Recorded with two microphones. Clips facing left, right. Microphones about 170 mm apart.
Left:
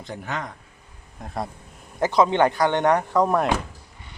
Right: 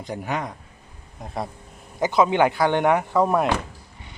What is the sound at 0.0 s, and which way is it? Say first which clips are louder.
Speech: right 3 dB; 15° right (ahead or behind).